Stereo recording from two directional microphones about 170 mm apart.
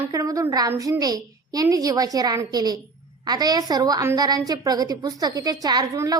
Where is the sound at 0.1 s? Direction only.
20° right (ahead or behind).